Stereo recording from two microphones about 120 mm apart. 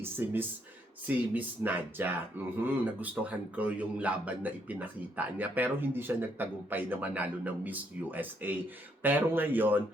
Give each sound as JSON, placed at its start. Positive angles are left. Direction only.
{"t": 0.0, "sound": "speech", "side_deg": -20}